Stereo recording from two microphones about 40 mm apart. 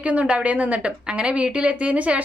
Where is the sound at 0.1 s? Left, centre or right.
Right.